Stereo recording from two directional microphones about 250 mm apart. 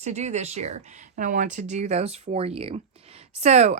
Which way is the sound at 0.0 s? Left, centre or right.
Right.